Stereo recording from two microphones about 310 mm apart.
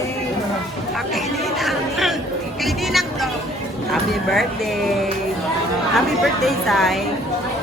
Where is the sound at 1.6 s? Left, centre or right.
Centre.